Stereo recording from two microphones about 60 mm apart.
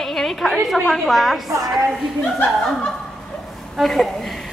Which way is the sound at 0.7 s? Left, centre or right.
Centre.